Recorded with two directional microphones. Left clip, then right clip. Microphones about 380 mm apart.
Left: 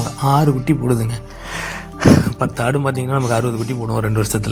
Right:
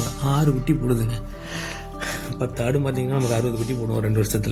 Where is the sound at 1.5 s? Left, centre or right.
Right.